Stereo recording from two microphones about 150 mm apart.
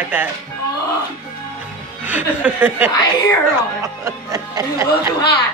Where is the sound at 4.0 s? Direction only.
20° right (ahead or behind).